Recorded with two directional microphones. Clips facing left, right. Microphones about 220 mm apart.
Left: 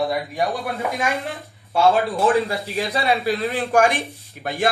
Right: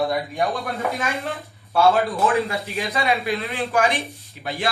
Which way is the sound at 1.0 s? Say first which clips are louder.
Left 2 dB; 15° left (ahead or behind).